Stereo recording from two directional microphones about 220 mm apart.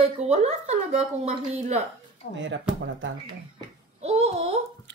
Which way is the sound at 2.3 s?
55° right (ahead or behind).